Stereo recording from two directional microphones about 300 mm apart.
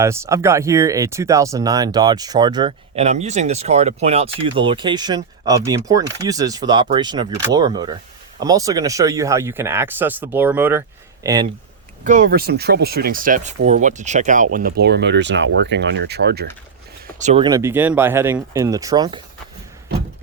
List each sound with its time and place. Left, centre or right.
0.0 s speech: centre
12.0 s speech: right
17.2 s speech: right